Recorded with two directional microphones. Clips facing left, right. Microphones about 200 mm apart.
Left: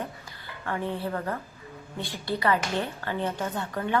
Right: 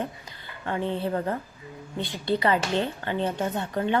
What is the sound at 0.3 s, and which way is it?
Speech, 20° right (ahead or behind).